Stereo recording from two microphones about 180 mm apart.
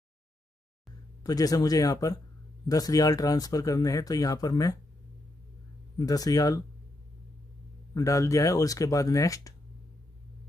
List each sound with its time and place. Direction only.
1.2 s speech: 20° left (ahead or behind)
5.9 s speech: 20° left (ahead or behind)
7.9 s speech: 20° left (ahead or behind)